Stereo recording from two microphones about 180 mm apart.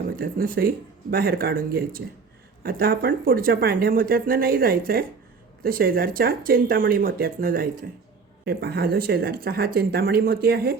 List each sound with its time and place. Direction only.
0.2 s speech: 55° right (ahead or behind)